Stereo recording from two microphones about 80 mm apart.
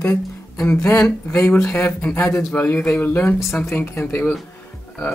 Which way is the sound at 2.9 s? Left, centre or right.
Left.